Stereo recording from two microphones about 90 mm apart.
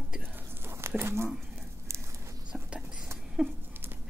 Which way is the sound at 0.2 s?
25° right (ahead or behind).